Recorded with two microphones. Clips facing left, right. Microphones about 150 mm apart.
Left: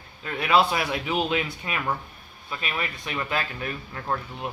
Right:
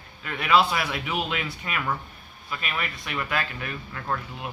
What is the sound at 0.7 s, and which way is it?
Speech, 35° left (ahead or behind).